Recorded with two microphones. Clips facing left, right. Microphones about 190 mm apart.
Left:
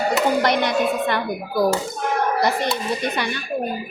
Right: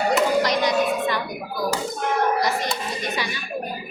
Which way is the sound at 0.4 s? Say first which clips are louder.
Left 2 dB; 60° left (ahead or behind).